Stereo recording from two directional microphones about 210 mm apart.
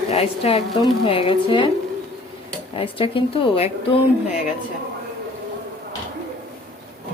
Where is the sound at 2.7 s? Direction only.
25° left (ahead or behind).